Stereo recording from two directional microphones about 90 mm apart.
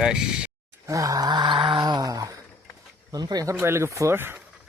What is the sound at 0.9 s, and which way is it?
Wail, 40° right (ahead or behind).